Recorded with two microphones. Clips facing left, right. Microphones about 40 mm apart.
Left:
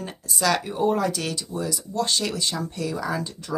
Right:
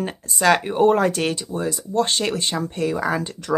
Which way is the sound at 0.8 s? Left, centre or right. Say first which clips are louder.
Right 6 dB; right.